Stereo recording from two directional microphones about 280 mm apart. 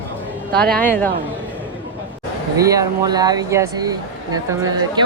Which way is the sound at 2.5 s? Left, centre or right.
Centre.